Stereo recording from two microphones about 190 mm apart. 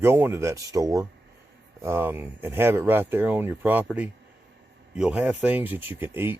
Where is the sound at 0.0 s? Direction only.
10° right (ahead or behind).